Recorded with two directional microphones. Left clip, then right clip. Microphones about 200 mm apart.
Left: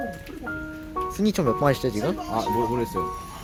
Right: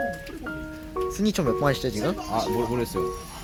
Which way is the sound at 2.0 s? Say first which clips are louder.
Right 1 dB; 5° left (ahead or behind).